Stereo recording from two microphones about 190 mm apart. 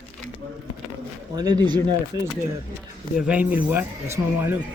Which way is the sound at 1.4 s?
20° right (ahead or behind).